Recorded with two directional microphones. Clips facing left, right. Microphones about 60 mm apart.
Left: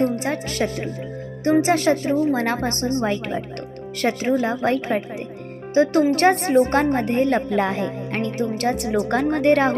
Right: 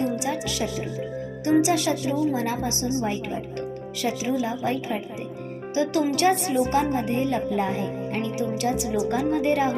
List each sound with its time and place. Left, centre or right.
0.0 s a woman's voice: left
5.7 s a woman's voice: left